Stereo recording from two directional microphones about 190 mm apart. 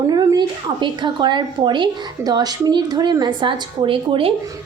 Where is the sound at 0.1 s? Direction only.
20° right (ahead or behind).